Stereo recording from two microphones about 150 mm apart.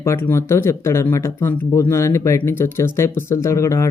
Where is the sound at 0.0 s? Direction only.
15° left (ahead or behind).